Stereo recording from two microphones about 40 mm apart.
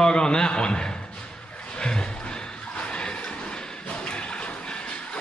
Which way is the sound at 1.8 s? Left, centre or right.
Left.